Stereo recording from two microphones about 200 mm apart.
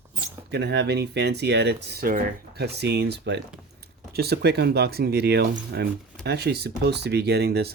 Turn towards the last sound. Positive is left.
turn(degrees=-55)  # may be behind; listen again after turning